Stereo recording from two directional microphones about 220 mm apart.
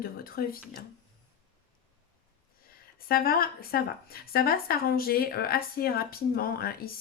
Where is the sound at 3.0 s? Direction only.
40° left (ahead or behind).